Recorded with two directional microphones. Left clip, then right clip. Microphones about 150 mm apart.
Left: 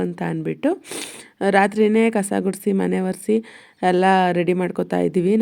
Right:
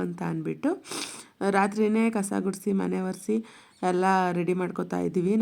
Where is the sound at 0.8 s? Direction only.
15° left (ahead or behind).